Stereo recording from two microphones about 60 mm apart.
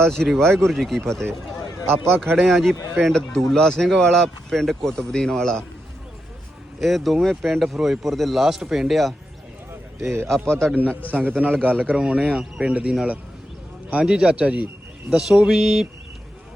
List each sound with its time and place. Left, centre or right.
0.0 s speech: centre
1.9 s a man's voice: right
2.3 s speech: centre
6.7 s speech: centre
10.0 s a man's voice: right
10.2 s speech: centre
11.1 s a man's voice: right
11.9 s a man's voice: centre
15.4 s speech: centre